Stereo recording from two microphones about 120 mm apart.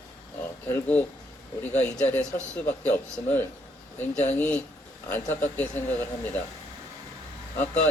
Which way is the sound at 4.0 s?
70° left (ahead or behind).